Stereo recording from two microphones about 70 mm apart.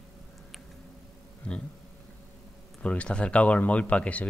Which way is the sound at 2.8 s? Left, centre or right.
Centre.